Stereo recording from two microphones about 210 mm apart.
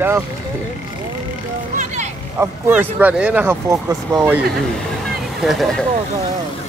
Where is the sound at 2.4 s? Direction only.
10° right (ahead or behind).